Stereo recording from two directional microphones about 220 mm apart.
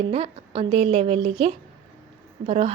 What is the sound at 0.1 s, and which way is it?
A woman's voice, 25° right (ahead or behind).